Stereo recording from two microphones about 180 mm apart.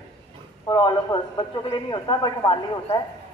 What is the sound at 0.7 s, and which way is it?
A woman's voice, 25° left (ahead or behind).